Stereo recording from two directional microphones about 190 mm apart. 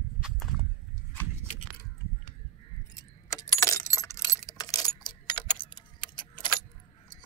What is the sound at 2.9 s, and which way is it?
Keys jangling, 15° left (ahead or behind).